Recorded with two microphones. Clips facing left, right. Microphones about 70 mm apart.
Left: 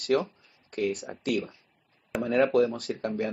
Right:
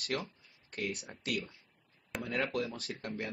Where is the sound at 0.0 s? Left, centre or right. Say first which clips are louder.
Left 12 dB; left.